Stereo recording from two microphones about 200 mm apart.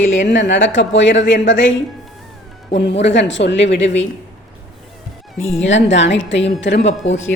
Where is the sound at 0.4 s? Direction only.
65° left (ahead or behind).